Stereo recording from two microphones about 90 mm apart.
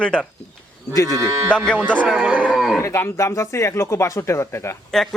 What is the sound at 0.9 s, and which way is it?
Speech, 40° left (ahead or behind).